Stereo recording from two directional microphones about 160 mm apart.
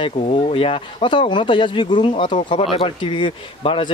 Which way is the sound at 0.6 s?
30° left (ahead or behind).